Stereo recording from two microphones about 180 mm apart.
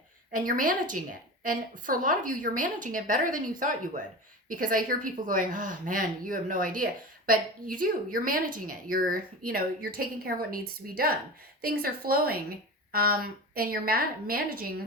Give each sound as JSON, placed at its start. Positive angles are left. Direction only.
{"t": 0.3, "sound": "a woman's voice", "side_deg": -50}